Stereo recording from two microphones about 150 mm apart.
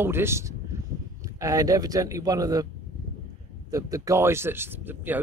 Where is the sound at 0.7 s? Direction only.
20° right (ahead or behind).